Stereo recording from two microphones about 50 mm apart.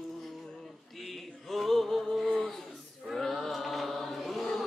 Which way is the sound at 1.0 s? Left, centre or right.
Centre.